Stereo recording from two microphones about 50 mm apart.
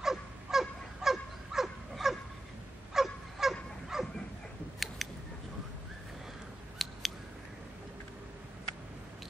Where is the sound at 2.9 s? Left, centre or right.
Centre.